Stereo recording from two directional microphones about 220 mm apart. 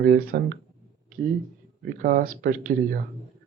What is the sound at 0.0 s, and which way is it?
Speech, 40° right (ahead or behind).